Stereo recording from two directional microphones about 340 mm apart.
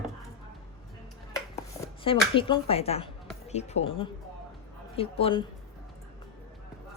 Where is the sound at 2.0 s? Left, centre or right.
Centre.